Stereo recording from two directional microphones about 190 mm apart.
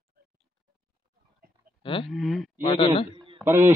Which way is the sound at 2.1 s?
Centre (ahead or behind).